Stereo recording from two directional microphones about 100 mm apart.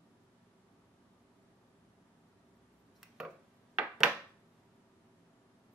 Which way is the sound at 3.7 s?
Centre (ahead or behind).